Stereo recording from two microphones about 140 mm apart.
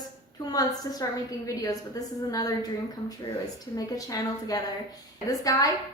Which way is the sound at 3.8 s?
25° left (ahead or behind).